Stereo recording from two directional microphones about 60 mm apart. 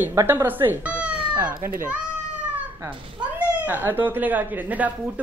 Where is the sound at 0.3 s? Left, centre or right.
Right.